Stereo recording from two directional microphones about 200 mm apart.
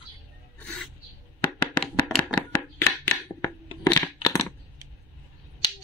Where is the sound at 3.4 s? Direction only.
20° left (ahead or behind).